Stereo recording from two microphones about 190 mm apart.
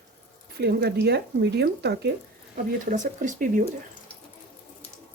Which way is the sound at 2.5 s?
40° right (ahead or behind).